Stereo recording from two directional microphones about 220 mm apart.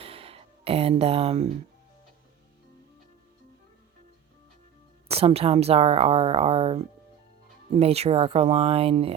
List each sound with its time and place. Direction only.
0.0 s a sound: 25° right (ahead or behind)
5.0 s speech: 25° right (ahead or behind)
7.8 s speech: 30° right (ahead or behind)